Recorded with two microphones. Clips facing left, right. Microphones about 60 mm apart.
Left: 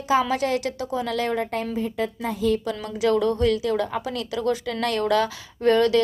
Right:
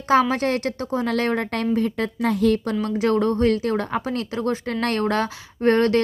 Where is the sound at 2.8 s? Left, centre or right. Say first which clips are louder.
Even; right.